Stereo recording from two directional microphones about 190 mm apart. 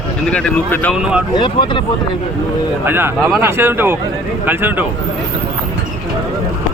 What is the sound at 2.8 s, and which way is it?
Speech, 10° right (ahead or behind).